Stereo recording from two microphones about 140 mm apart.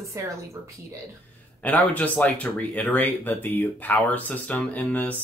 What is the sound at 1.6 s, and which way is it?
Speech, 10° left (ahead or behind).